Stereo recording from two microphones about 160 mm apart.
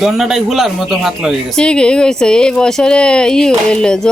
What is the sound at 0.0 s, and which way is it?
Speech, centre (ahead or behind).